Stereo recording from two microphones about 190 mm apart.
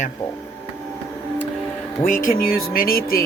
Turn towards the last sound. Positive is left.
turn(degrees=50)  # may be behind; listen again after turning